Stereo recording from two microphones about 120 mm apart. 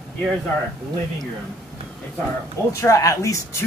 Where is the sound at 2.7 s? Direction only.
25° left (ahead or behind).